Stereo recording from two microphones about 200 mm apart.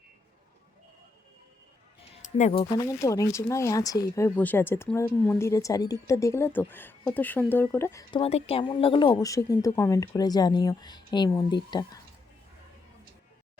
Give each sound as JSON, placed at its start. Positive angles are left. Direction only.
{"t": 2.2, "sound": "speech", "side_deg": 30}
{"t": 8.1, "sound": "speech", "side_deg": 30}